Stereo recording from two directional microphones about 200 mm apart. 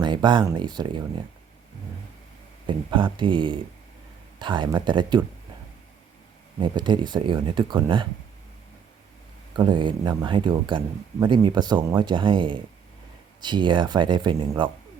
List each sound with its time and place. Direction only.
0.0 s speech: 20° right (ahead or behind)
2.6 s speech: 25° right (ahead or behind)
6.6 s speech: 25° right (ahead or behind)
9.6 s speech: 25° right (ahead or behind)